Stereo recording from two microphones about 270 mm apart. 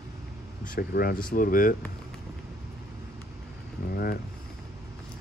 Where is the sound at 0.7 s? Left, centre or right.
Left.